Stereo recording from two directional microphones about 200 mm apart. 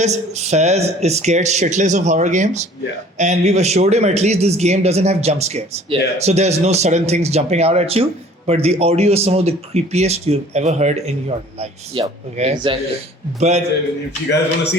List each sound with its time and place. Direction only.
0.0 s speech: 35° right (ahead or behind)
14.3 s a man's voice: 55° left (ahead or behind)